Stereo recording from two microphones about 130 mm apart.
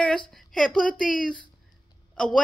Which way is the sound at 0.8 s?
90° left.